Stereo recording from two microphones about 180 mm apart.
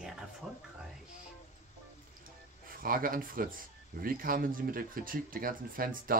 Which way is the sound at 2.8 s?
50° right (ahead or behind).